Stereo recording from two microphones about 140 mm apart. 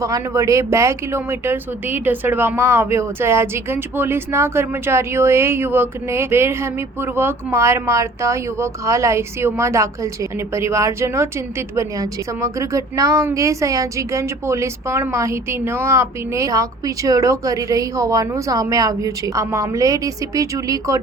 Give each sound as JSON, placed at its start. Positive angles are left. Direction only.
{"t": 0.0, "sound": "speech", "side_deg": -25}